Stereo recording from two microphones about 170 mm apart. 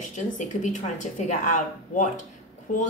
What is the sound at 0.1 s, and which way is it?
Speech, 45° left (ahead or behind).